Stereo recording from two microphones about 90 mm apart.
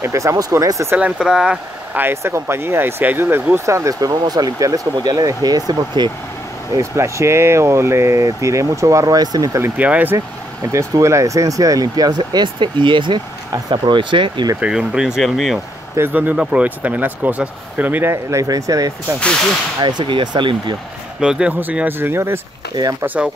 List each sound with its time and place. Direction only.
0.0 s speech: 35° right (ahead or behind)
1.1 s speech: 10° right (ahead or behind)
2.0 s speech: 25° right (ahead or behind); by 6.1 s 50° right (ahead or behind)
6.7 s speech: 35° right (ahead or behind)
9.8 s speech: 15° right (ahead or behind)
10.7 s speech: 35° right (ahead or behind); by 14.5 s 65° right (ahead or behind)
14.6 s speech: 10° right (ahead or behind)
16.0 s speech: 20° right (ahead or behind)
18.1 s speech: 35° right (ahead or behind)
19.1 s speech: 10° left (ahead or behind)
19.8 s speech: 55° right (ahead or behind)
21.2 s speech: 10° right (ahead or behind)
21.5 s speech: 20° right (ahead or behind)
23.0 s speech: 15° right (ahead or behind)